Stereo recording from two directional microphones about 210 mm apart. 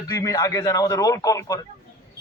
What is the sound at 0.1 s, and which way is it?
A man's voice, 15° left (ahead or behind).